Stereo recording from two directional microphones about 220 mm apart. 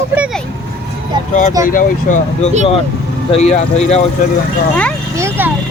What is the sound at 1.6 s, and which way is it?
Speech, 35° left (ahead or behind).